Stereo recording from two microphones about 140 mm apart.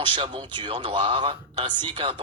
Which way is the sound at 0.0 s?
35° right (ahead or behind).